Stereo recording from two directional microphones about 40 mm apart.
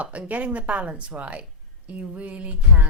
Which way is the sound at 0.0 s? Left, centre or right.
Right.